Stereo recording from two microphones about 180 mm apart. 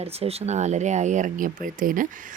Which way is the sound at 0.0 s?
35° right (ahead or behind).